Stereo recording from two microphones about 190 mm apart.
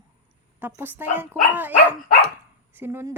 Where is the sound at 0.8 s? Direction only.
10° right (ahead or behind).